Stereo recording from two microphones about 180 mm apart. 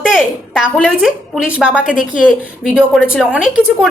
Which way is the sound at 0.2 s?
5° left (ahead or behind).